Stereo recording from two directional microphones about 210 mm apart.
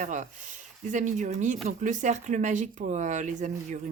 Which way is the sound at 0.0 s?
35° right (ahead or behind).